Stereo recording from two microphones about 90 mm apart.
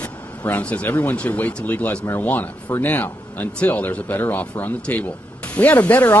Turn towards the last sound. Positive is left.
turn(degrees=20)  # may be behind; listen again after turning